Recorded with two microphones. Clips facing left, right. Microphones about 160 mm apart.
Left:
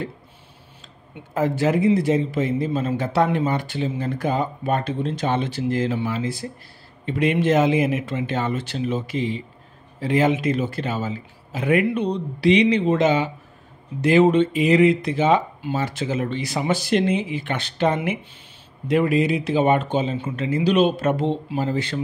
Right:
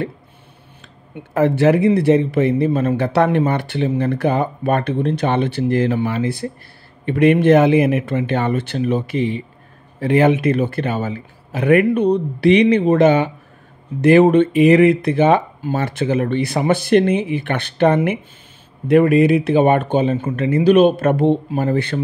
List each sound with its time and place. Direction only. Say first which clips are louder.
1.3 s speech: right 6 dB; 65° right (ahead or behind)